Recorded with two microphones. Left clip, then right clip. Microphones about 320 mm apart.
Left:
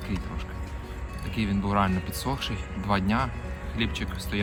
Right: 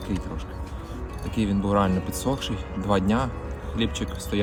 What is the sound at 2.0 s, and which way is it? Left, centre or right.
Speech, left.